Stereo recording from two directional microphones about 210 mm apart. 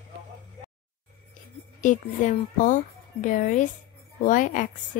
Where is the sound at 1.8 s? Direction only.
35° left (ahead or behind).